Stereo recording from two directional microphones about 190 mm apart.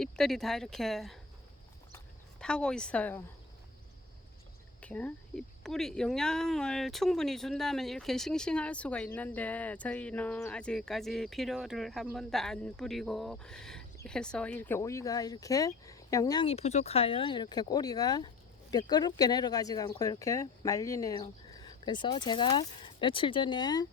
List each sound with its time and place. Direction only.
0.0 s speech: centre (ahead or behind)
2.4 s speech: 5° left (ahead or behind)
4.8 s speech: 5° left (ahead or behind)